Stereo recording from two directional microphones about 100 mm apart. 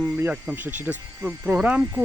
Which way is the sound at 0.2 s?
20° right (ahead or behind).